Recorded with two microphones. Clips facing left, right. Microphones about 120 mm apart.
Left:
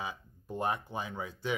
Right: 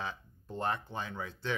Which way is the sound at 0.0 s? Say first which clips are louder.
Even; 10° left (ahead or behind).